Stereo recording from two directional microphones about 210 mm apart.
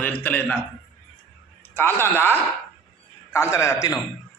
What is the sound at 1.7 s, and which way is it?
A man's voice, 10° left (ahead or behind).